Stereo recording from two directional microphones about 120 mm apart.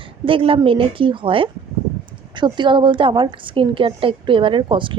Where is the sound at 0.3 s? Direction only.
50° right (ahead or behind).